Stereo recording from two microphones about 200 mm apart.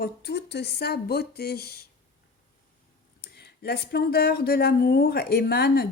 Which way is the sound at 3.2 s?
50° left (ahead or behind).